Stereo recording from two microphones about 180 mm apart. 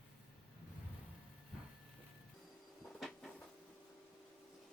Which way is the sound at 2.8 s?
Centre (ahead or behind).